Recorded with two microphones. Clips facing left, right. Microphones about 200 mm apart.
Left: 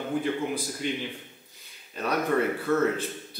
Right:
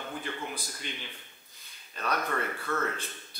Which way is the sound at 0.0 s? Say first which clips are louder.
Left 10 dB; 10° left (ahead or behind).